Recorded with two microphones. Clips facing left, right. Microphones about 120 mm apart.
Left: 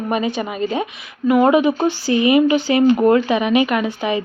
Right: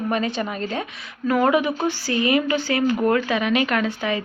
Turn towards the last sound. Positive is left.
turn(degrees=15)  # may be behind; listen again after turning